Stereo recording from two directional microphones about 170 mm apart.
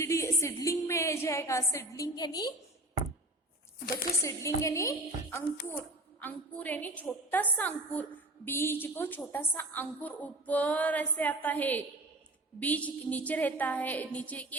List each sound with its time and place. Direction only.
0.0 s a woman's voice: 15° left (ahead or behind)
4.2 s a woman's voice: 20° left (ahead or behind)